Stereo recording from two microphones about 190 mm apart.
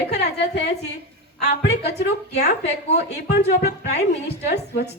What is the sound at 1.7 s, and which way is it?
A woman's voice, 60° left (ahead or behind).